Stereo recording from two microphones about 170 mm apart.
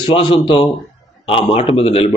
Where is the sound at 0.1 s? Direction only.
30° left (ahead or behind).